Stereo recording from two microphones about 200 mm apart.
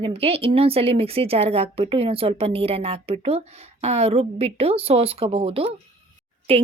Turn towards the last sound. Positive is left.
turn(degrees=-30)  # may be behind; listen again after turning